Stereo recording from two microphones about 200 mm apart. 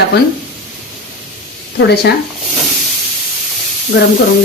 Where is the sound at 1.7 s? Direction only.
55° left (ahead or behind).